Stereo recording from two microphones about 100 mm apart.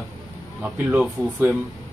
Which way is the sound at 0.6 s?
15° right (ahead or behind).